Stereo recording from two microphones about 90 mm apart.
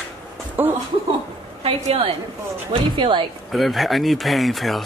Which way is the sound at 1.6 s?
90° right.